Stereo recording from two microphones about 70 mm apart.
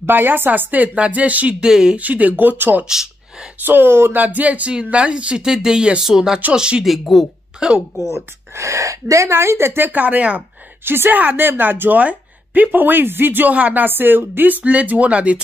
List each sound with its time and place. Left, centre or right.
0.0 s a woman's voice: right; by 2.0 s centre
2.0 s a woman's voice: right
2.8 s speech: centre
3.6 s a woman's voice: right; by 6.9 s centre
6.9 s speech: centre
7.6 s speech: centre
8.1 s speech: right
9.3 s a woman's voice: right; by 15.4 s centre